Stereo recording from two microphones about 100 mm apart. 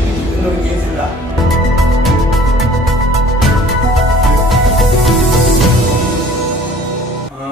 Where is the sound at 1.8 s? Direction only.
Centre (ahead or behind).